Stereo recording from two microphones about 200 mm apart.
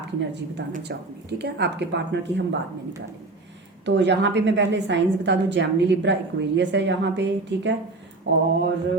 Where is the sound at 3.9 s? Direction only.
60° right (ahead or behind).